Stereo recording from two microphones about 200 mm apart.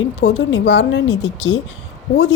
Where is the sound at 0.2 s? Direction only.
60° left (ahead or behind).